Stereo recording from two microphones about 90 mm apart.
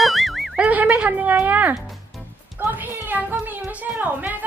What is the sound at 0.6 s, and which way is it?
Speech, 15° right (ahead or behind).